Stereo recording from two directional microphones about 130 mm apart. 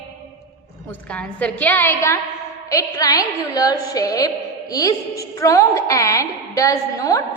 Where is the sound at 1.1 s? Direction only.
10° left (ahead or behind).